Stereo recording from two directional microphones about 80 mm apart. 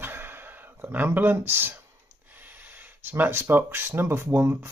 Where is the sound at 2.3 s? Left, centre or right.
Right.